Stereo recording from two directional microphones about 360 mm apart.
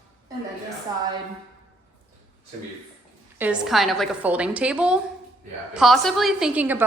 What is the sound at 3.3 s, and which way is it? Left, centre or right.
A woman's voice, centre.